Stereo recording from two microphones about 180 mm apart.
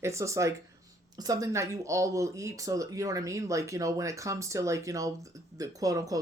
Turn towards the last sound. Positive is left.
turn(degrees=-20)  # may be behind; listen again after turning